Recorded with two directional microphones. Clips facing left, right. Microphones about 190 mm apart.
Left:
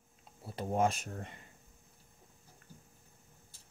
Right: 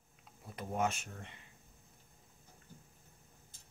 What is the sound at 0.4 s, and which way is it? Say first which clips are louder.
Speech: left 5 dB; 30° left (ahead or behind).